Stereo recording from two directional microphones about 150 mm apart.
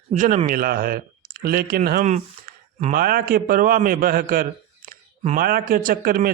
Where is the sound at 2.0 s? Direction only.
50° right (ahead or behind).